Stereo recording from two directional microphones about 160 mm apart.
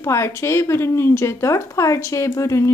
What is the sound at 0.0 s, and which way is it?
Speech, 20° left (ahead or behind).